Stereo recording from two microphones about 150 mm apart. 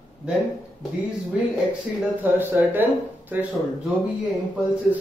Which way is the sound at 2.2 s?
10° right (ahead or behind).